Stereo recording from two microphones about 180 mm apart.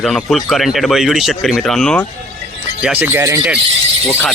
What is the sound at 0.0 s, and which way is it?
Speech, centre (ahead or behind).